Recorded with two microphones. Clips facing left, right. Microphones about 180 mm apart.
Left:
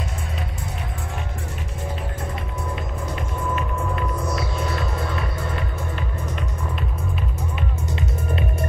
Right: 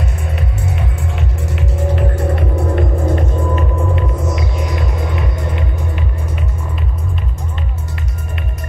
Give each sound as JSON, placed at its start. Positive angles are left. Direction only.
{"t": 2.0, "sound": "music", "side_deg": -70}
{"t": 3.5, "sound": "music", "side_deg": -25}